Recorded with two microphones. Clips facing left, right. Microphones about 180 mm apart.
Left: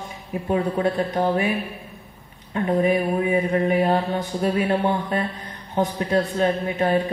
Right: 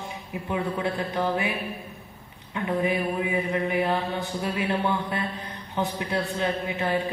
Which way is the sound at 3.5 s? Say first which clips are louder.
Left 5 dB; 40° left (ahead or behind).